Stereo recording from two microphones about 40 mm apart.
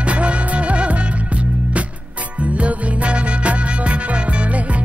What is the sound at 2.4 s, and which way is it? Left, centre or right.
Music, right.